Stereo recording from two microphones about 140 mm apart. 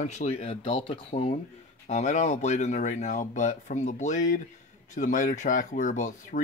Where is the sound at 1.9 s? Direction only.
55° left (ahead or behind).